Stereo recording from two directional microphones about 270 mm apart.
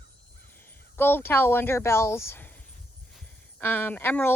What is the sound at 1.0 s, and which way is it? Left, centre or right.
Speech, centre.